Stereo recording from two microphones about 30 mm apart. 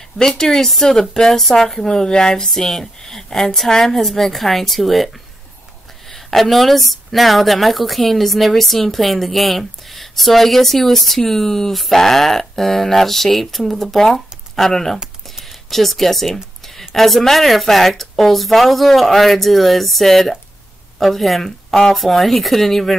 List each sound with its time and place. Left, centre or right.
0.2 s speech: centre
2.0 s speech: left
2.4 s a woman's voice: centre
15.4 s a sound: centre
16.9 s a woman's voice: centre
21.9 s a woman's voice: centre